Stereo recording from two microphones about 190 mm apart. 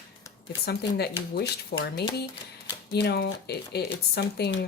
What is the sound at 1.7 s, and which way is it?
Speech, 60° left (ahead or behind).